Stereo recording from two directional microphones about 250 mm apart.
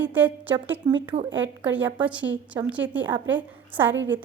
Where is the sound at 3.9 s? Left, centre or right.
Right.